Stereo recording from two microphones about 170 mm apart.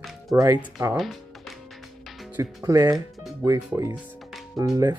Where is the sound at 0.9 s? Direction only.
Centre (ahead or behind).